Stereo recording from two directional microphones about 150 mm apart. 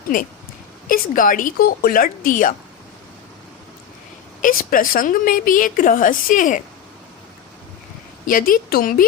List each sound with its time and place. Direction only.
0.9 s speech: 65° left (ahead or behind)
4.4 s a woman's voice: 65° left (ahead or behind)
8.3 s speech: 75° left (ahead or behind)